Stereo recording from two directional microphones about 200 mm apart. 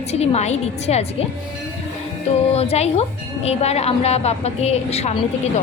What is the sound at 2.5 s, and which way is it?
A woman's voice, 30° left (ahead or behind).